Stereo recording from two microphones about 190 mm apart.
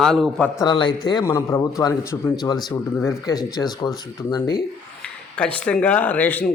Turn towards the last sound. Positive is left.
turn(degrees=10)  # may be behind; listen again after turning